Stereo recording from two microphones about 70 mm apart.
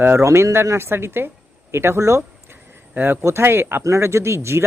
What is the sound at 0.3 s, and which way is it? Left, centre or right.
Speech, right.